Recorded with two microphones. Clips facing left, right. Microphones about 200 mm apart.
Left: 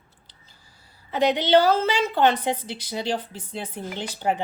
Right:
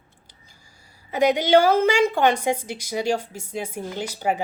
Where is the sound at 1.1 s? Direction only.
10° right (ahead or behind).